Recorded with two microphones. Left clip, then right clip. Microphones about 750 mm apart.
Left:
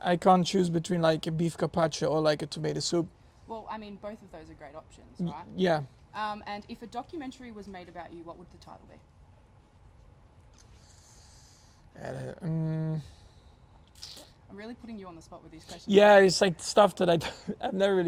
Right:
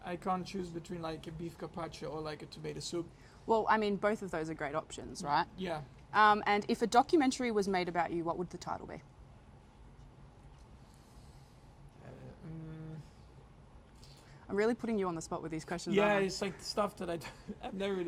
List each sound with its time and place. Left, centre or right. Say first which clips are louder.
0.0 s speech: left 14 dB; left
3.5 s a woman's voice: right 10 dB; right
5.5 s speech: left 13 dB; left
6.1 s a woman's voice: right 10 dB; right
14.5 s a woman's voice: right 12 dB; right
16.0 s a man's voice: left 13 dB; left